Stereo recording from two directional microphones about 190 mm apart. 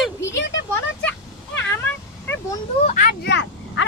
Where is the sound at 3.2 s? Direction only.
65° left (ahead or behind).